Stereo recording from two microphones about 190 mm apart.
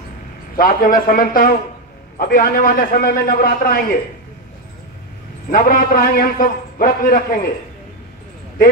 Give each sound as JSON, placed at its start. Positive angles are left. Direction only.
{"t": 0.6, "sound": "a man's voice", "side_deg": 50}
{"t": 5.5, "sound": "a man's voice", "side_deg": 50}